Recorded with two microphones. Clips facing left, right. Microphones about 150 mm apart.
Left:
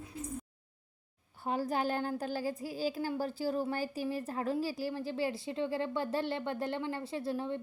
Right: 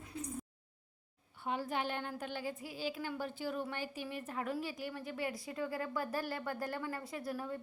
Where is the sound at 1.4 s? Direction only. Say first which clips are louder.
Left 5 dB; 40° left (ahead or behind).